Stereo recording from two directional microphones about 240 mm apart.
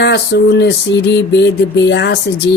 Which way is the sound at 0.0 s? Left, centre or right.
Left.